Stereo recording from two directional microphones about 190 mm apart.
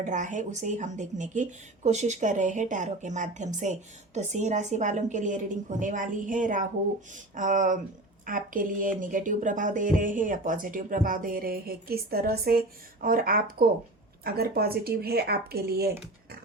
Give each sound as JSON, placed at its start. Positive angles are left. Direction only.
{"t": 0.0, "sound": "a woman's voice", "side_deg": -40}